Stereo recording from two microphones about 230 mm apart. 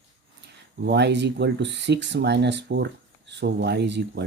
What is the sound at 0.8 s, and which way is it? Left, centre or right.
Speech, right.